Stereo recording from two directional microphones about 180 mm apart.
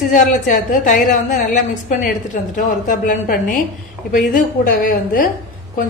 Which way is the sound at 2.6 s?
45° left (ahead or behind).